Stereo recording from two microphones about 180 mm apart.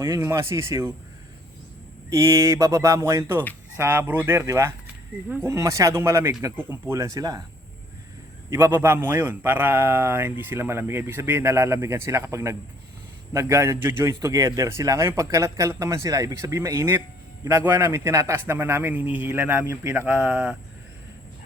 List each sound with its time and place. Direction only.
0.0 s a man's voice: 15° right (ahead or behind)
2.0 s a man's voice: 15° right (ahead or behind)
8.4 s a man's voice: 15° right (ahead or behind)